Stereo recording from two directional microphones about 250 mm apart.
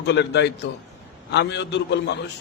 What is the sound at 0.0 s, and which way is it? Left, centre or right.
A man's voice, left.